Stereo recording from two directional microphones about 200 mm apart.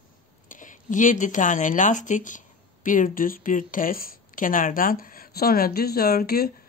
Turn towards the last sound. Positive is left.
turn(degrees=50)  # may be behind; listen again after turning